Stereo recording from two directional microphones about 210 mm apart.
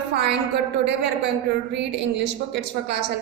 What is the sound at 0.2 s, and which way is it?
A woman's voice, 55° right (ahead or behind).